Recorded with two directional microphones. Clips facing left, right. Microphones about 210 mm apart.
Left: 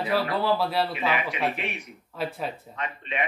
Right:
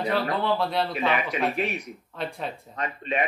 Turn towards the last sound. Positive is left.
turn(degrees=-40)  # may be behind; listen again after turning